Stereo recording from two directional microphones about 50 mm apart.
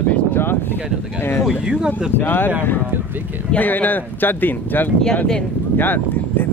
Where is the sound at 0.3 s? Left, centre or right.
Left.